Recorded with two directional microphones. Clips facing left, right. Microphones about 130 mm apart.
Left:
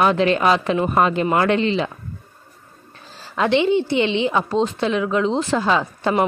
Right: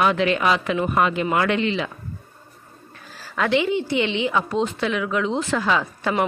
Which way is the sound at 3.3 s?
25° left (ahead or behind).